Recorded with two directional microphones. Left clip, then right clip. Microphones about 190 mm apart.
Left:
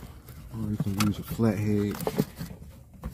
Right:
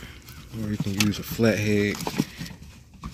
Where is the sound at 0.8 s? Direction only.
15° left (ahead or behind).